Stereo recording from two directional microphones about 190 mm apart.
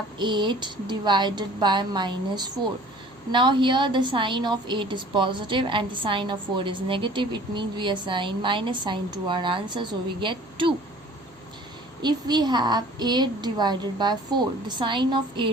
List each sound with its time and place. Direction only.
0.2 s a woman's voice: 25° right (ahead or behind)
12.0 s a woman's voice: 20° right (ahead or behind)